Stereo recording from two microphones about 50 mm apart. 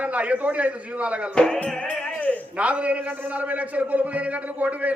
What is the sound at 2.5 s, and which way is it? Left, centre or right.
A man's voice, right.